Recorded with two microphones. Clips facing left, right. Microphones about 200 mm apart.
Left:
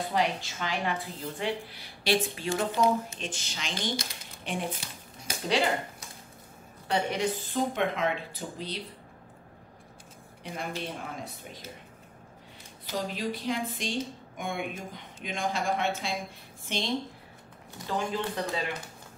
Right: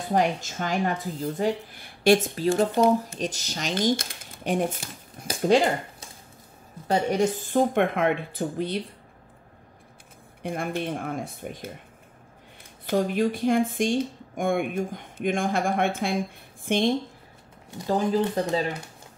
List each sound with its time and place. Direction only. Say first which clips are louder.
0.1 s speech: right 8 dB; 45° right (ahead or behind)
6.9 s speech: right 6 dB; 45° right (ahead or behind)
10.4 s speech: right 7 dB; 55° right (ahead or behind)
12.8 s speech: right 9 dB; 55° right (ahead or behind)
17.8 s speech: right 8 dB; 40° right (ahead or behind)